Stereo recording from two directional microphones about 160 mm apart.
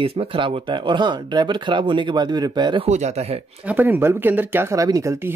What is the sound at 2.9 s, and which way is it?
Speech, 45° right (ahead or behind).